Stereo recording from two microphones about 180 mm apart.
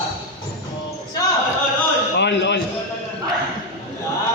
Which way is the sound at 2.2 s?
75° left (ahead or behind).